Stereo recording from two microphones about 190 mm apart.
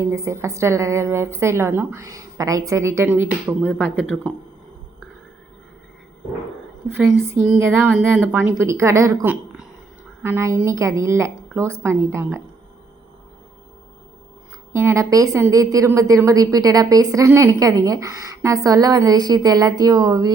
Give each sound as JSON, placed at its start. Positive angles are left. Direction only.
{"t": 0.0, "sound": "a woman's voice", "side_deg": -15}
{"t": 3.7, "sound": "speech", "side_deg": 5}
{"t": 7.4, "sound": "a woman's voice", "side_deg": -10}
{"t": 14.7, "sound": "a woman's voice", "side_deg": -15}